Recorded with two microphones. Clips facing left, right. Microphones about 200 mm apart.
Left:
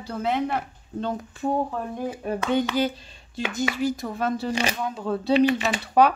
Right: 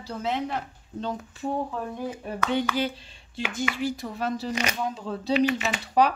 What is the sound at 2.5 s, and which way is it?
Speech, 45° left (ahead or behind).